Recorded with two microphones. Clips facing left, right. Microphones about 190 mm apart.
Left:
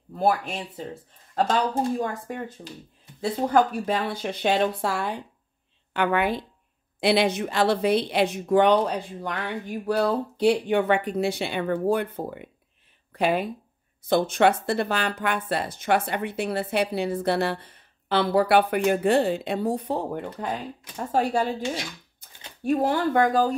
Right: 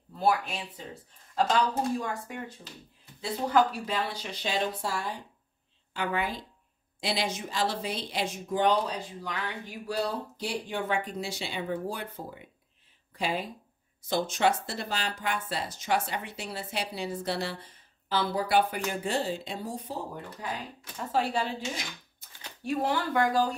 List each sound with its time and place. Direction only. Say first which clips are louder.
0.2 s speech: left 3 dB; 50° left (ahead or behind)
2.0 s a woman's voice: left 5 dB; 50° left (ahead or behind)
22.7 s speech: left 6 dB; 50° left (ahead or behind)